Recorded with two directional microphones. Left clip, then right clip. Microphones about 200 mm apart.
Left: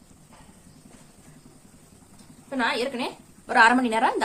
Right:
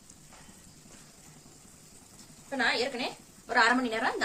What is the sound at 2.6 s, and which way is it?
A woman's voice, 30° left (ahead or behind).